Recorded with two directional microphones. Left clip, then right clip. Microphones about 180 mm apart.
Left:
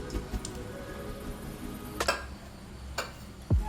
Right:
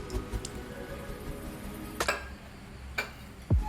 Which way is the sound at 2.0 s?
Centre (ahead or behind).